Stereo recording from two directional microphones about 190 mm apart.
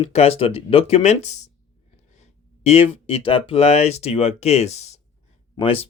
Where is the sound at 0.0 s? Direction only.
35° left (ahead or behind).